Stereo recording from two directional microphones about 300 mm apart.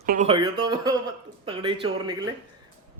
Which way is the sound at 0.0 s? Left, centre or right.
Right.